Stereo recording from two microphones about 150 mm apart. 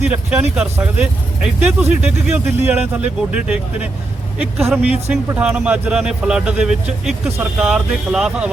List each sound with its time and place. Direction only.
0.1 s speech: 10° right (ahead or behind)
5.3 s speech: 15° right (ahead or behind)